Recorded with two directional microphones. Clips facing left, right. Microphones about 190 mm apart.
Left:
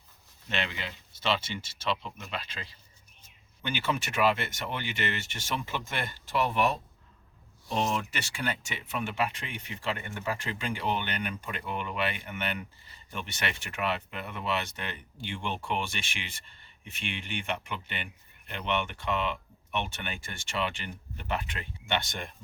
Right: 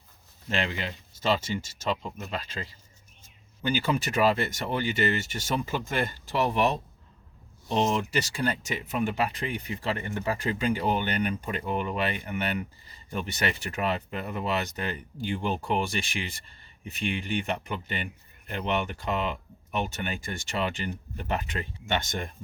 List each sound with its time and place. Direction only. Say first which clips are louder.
0.4 s speech: right 4 dB; 40° right (ahead or behind)
8.1 s speech: right 6 dB; 35° right (ahead or behind)